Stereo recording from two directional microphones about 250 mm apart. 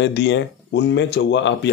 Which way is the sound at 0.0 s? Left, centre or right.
Left.